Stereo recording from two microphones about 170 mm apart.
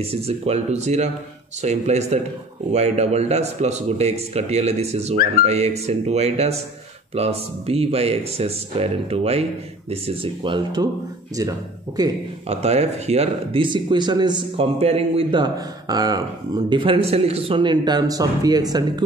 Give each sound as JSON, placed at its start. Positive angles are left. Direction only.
{"t": 0.0, "sound": "speech", "side_deg": -35}
{"t": 12.4, "sound": "speech", "side_deg": -40}